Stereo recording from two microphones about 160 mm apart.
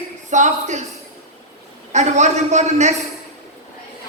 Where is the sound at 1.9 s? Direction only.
45° right (ahead or behind).